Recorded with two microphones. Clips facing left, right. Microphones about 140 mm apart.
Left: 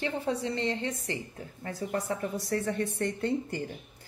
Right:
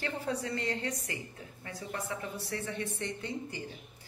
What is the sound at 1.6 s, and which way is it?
A woman's voice, 40° left (ahead or behind).